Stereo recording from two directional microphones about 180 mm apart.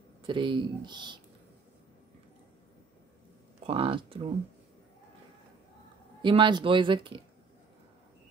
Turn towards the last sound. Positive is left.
turn(degrees=-30)  # may be behind; listen again after turning